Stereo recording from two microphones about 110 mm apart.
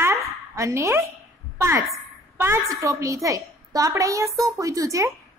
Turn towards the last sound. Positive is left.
turn(degrees=-30)  # may be behind; listen again after turning